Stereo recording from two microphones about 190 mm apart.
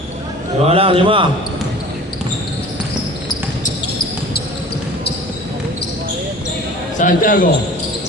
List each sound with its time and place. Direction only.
0.6 s a man's voice: 30° right (ahead or behind)
7.0 s a man's voice: 45° left (ahead or behind)